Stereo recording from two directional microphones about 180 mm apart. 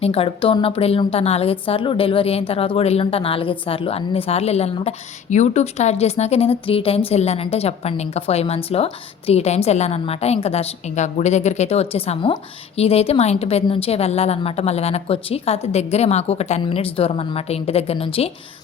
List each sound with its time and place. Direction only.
0.0 s a woman's voice: 30° left (ahead or behind)